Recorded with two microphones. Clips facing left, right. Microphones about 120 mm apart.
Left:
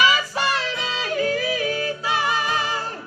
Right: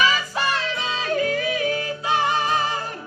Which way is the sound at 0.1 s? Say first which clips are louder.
Left 1 dB; 40° right (ahead or behind).